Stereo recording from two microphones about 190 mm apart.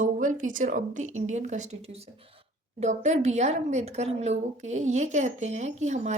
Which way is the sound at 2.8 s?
40° right (ahead or behind).